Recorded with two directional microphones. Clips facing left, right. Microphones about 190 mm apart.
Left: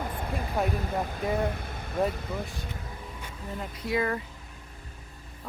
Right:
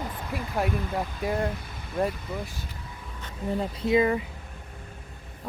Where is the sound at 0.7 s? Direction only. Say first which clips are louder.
Right 1 dB; 45° left (ahead or behind).